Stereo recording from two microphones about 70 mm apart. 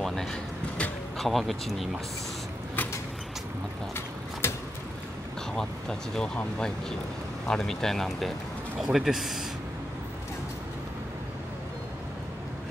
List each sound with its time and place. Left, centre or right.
0.0 s music: centre
1.1 s speech: centre
3.9 s mechanisms: left
5.6 s speech: centre